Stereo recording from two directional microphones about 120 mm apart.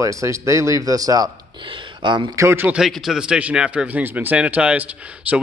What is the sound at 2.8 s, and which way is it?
A man's voice, centre (ahead or behind).